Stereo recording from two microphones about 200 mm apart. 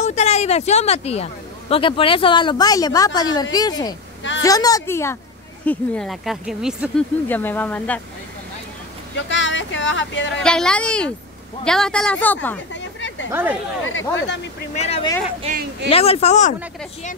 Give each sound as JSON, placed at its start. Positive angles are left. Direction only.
{"t": 0.0, "sound": "a woman's voice", "side_deg": 35}
{"t": 5.7, "sound": "speech", "side_deg": 0}
{"t": 7.2, "sound": "a woman's voice", "side_deg": 10}
{"t": 9.1, "sound": "speech", "side_deg": 65}
{"t": 10.4, "sound": "speech", "side_deg": 5}
{"t": 12.7, "sound": "a sound", "side_deg": 65}
{"t": 13.3, "sound": "speech", "side_deg": -10}
{"t": 14.1, "sound": "speech", "side_deg": 60}
{"t": 15.5, "sound": "speech", "side_deg": -30}
{"t": 15.9, "sound": "speech", "side_deg": 30}